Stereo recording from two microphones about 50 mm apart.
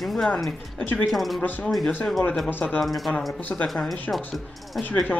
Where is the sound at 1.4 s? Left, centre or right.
Left.